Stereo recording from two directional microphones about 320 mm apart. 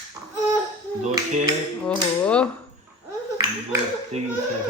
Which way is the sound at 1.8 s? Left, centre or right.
Centre.